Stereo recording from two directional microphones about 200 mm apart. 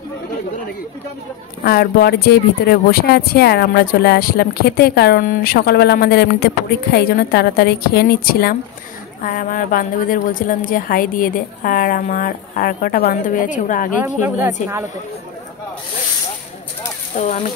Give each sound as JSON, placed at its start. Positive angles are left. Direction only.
{"t": 1.6, "sound": "speech", "side_deg": 50}
{"t": 14.0, "sound": "a woman's voice", "side_deg": -10}